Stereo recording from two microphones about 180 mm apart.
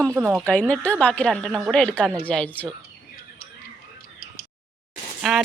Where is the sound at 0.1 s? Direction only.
10° right (ahead or behind).